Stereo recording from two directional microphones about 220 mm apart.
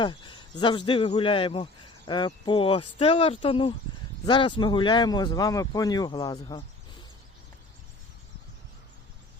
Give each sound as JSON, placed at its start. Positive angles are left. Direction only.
{"t": 0.0, "sound": "a man's voice", "side_deg": 20}